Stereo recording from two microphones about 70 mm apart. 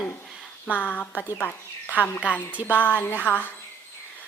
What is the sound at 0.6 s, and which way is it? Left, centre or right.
Speech, left.